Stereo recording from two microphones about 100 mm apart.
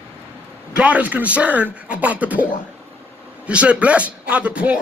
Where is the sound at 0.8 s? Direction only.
15° right (ahead or behind).